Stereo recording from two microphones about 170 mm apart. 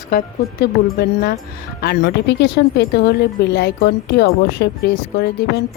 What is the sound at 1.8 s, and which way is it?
Speech, 75° left (ahead or behind).